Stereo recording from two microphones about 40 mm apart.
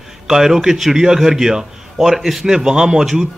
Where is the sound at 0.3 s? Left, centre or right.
Centre.